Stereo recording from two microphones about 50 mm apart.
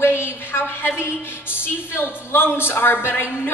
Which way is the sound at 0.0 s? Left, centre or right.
Left.